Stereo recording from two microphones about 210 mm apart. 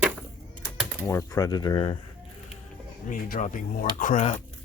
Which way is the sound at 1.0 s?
15° left (ahead or behind).